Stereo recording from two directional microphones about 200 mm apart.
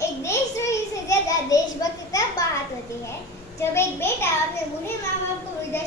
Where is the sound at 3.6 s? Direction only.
10° left (ahead or behind).